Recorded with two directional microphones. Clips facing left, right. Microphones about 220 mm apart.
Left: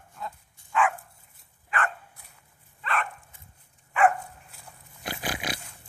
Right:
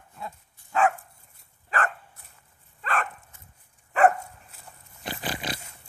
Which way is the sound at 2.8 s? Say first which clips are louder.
Right 1 dB; 45° right (ahead or behind).